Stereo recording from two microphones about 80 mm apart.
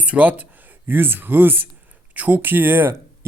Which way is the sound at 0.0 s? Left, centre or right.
Centre.